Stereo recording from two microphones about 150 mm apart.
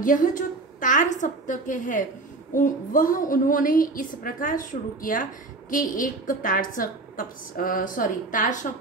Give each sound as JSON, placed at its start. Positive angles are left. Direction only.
{"t": 0.0, "sound": "a woman's voice", "side_deg": 65}